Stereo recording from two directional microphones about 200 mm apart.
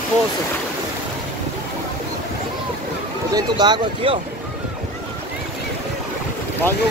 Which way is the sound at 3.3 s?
20° right (ahead or behind).